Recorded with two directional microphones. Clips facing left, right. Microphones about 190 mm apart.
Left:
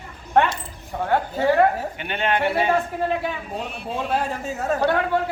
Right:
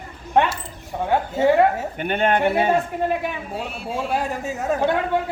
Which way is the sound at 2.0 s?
50° right (ahead or behind).